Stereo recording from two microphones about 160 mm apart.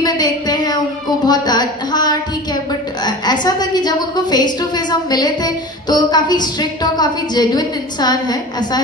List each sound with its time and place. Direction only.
0.0 s a woman's voice: 25° left (ahead or behind)